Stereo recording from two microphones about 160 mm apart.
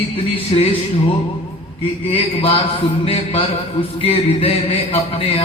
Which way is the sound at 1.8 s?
35° left (ahead or behind).